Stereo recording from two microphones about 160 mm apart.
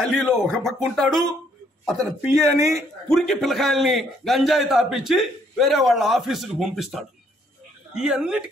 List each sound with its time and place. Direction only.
0.0 s a man's voice: centre (ahead or behind)
2.2 s speech: 20° right (ahead or behind)
3.1 s a man's voice: centre (ahead or behind)